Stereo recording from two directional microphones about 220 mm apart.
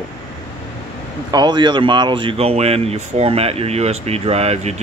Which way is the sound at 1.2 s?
20° right (ahead or behind).